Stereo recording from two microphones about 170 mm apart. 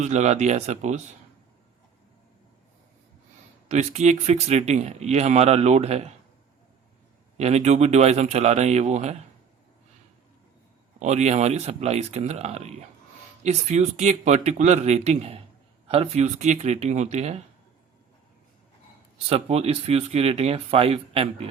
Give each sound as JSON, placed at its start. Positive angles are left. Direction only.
{"t": 0.0, "sound": "speech", "side_deg": -40}
{"t": 3.7, "sound": "speech", "side_deg": -40}
{"t": 7.3, "sound": "speech", "side_deg": -40}
{"t": 11.0, "sound": "speech", "side_deg": -40}
{"t": 19.3, "sound": "speech", "side_deg": -35}